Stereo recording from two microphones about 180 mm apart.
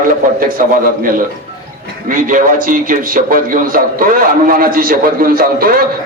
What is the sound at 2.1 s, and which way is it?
A man's voice, 50° right (ahead or behind).